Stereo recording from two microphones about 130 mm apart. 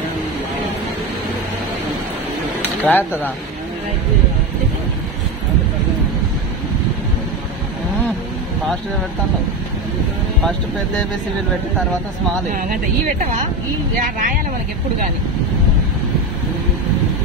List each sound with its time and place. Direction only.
2.8 s speech: 15° left (ahead or behind)
13.9 s speech: 90° right